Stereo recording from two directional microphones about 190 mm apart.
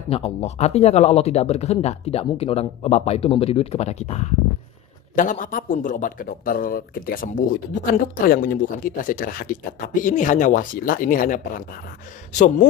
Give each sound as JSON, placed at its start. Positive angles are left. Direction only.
{"t": 0.1, "sound": "speech", "side_deg": 35}